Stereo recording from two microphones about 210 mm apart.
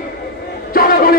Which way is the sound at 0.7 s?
45° left (ahead or behind).